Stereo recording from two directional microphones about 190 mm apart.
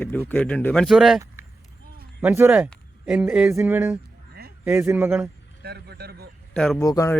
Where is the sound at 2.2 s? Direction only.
10° right (ahead or behind).